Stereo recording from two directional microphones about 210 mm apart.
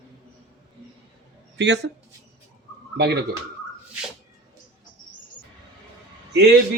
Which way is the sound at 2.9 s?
50° right (ahead or behind).